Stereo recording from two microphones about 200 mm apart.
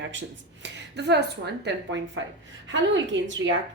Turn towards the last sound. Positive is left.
turn(degrees=-65)  # may be behind; listen again after turning